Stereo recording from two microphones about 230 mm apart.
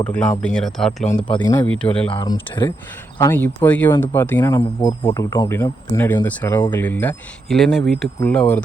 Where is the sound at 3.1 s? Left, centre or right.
Centre.